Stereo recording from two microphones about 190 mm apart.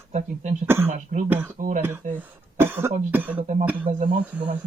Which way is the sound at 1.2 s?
10° right (ahead or behind).